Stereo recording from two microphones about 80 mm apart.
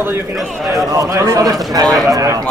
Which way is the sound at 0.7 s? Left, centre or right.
Right.